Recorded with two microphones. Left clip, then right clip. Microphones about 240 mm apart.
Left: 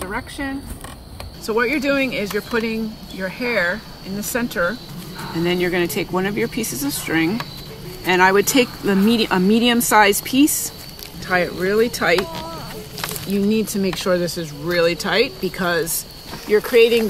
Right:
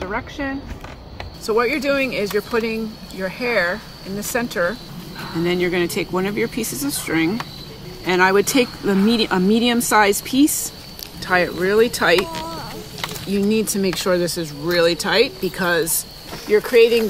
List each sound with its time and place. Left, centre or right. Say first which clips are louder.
0.0 s speech: right 1 dB; centre
5.4 s speech: even; centre
11.2 s speech: right 1 dB; centre
13.3 s speech: right 1 dB; centre